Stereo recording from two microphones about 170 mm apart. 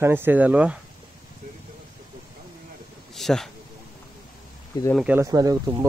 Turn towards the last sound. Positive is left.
turn(degrees=-20)  # may be behind; listen again after turning